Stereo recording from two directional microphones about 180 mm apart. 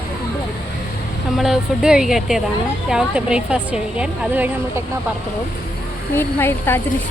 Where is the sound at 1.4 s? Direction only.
5° right (ahead or behind).